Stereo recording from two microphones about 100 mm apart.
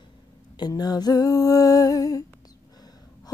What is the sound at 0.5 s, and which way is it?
Female singing, 45° left (ahead or behind).